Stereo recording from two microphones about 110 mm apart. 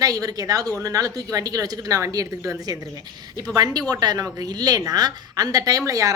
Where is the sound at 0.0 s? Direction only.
35° right (ahead or behind).